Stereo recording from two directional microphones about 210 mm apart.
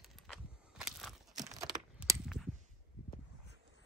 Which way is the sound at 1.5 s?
15° right (ahead or behind).